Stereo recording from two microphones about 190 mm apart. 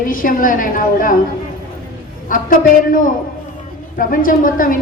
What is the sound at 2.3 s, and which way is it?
A woman's voice, 45° left (ahead or behind).